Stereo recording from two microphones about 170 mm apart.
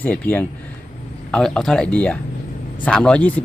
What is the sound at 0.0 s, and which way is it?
Speech, 10° left (ahead or behind).